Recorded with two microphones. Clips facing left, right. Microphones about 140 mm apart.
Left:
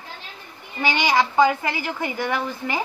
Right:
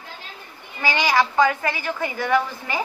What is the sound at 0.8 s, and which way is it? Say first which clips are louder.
A woman's voice: even; 20° left (ahead or behind).